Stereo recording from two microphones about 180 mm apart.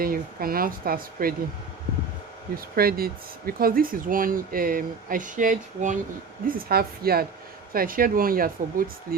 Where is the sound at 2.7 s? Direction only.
55° right (ahead or behind).